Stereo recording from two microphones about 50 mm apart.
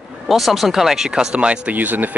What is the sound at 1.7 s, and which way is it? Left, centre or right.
Speech, right.